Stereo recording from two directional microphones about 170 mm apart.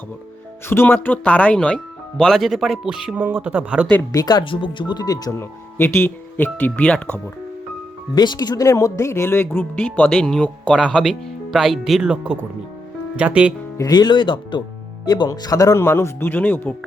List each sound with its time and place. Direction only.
0.7 s speech: 10° left (ahead or behind); by 3.8 s 10° right (ahead or behind)
4.1 s speech: 20° left (ahead or behind); by 7.2 s 5° left (ahead or behind)
8.1 s speech: 25° left (ahead or behind); by 13.5 s 10° right (ahead or behind)
13.7 s speech: 25° left (ahead or behind)